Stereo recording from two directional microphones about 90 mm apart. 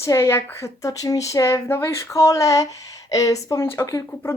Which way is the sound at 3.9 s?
35° left (ahead or behind).